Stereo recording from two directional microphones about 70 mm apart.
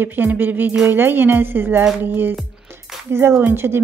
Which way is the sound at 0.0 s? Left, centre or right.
Right.